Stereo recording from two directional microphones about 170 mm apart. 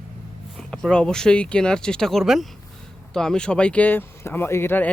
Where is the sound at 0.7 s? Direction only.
5° left (ahead or behind).